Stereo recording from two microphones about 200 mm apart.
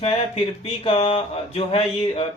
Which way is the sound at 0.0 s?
30° left (ahead or behind).